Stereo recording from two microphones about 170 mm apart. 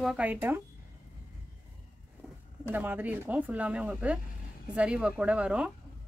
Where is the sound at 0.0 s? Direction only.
5° right (ahead or behind).